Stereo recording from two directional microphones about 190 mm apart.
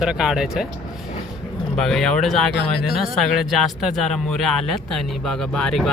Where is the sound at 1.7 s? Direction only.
Centre (ahead or behind).